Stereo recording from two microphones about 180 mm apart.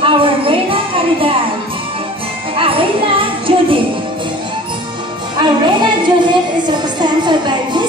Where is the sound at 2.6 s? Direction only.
30° right (ahead or behind).